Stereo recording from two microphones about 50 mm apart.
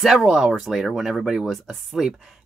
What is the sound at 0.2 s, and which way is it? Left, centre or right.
Speech, centre.